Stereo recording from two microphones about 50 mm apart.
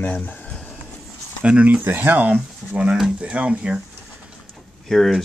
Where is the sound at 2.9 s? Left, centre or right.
Centre.